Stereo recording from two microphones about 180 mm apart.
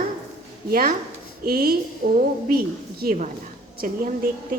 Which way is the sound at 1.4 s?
55° right (ahead or behind).